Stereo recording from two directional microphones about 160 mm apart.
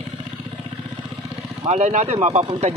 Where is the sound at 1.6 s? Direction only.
45° right (ahead or behind).